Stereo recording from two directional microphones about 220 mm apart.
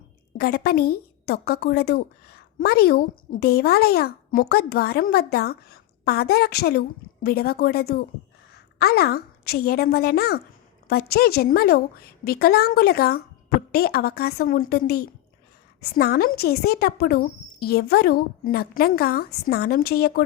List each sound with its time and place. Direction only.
0.3 s a woman's voice: 45° left (ahead or behind)